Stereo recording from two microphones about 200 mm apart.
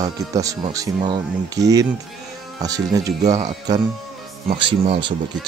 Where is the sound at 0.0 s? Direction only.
15° right (ahead or behind).